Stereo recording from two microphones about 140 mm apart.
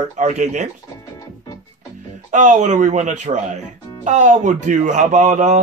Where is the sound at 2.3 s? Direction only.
60° right (ahead or behind).